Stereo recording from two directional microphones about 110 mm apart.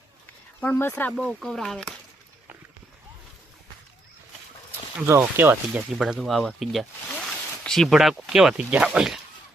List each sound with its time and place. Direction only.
0.6 s speech: 15° left (ahead or behind)
1.1 s speech: 5° left (ahead or behind)
5.0 s speech: 20° right (ahead or behind)
6.0 s speech: centre (ahead or behind)